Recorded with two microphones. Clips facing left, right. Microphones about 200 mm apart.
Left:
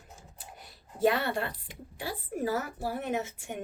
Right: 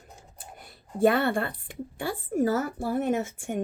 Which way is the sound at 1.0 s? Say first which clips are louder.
Right 5 dB; 55° right (ahead or behind).